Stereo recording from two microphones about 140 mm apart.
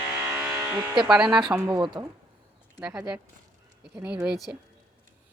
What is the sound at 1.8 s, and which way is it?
Speech, 35° right (ahead or behind).